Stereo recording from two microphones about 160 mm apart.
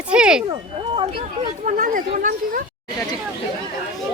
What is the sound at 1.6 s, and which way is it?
Speech, 55° right (ahead or behind).